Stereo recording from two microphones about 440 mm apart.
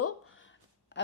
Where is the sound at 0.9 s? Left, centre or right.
Left.